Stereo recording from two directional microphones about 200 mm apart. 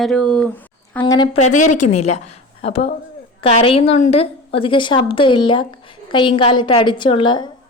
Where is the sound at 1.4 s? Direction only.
35° left (ahead or behind).